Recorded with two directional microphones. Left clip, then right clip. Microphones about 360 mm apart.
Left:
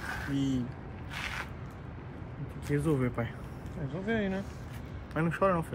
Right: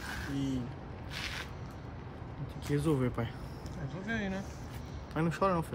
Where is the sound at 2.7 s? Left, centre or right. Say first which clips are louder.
Left 1 dB; centre.